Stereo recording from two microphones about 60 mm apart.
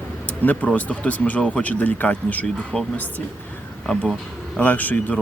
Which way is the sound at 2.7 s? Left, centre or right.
Centre.